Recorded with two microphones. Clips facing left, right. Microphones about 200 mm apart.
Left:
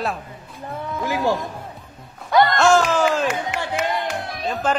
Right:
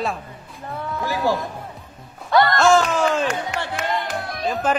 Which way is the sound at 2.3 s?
15° left (ahead or behind).